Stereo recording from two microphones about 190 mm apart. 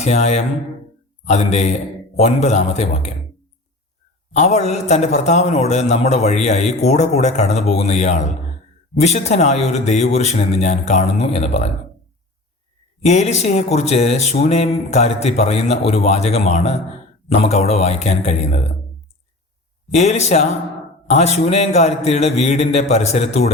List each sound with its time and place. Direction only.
0.0 s a man's voice: 35° left (ahead or behind)
4.3 s a man's voice: 35° left (ahead or behind)
13.0 s a man's voice: 35° left (ahead or behind)
19.9 s a man's voice: 35° left (ahead or behind)